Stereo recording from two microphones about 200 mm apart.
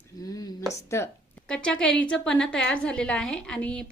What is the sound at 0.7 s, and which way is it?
A woman's voice, 15° left (ahead or behind).